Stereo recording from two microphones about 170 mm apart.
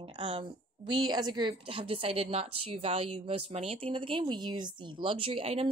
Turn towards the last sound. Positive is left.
turn(degrees=-35)  # may be behind; listen again after turning